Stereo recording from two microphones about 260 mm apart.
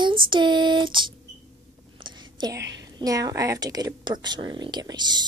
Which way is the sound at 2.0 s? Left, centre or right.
Centre.